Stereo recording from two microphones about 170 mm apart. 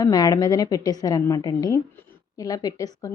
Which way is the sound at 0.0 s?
20° left (ahead or behind).